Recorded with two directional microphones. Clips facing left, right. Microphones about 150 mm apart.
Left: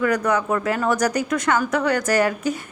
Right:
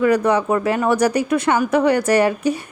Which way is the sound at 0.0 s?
30° right (ahead or behind).